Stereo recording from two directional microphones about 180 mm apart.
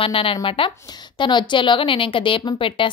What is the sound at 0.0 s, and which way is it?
A woman's voice, 30° left (ahead or behind).